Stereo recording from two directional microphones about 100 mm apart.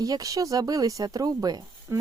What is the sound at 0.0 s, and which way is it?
Speech, 35° right (ahead or behind).